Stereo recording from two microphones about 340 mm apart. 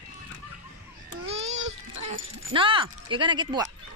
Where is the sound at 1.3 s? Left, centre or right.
Centre.